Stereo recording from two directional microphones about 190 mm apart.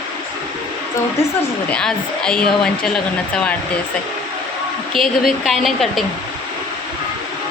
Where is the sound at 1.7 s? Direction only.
5° left (ahead or behind).